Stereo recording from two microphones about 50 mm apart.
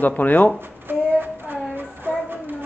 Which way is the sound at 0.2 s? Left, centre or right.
Left.